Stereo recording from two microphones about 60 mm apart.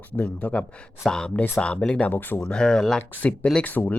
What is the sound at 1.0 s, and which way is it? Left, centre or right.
Speech, centre.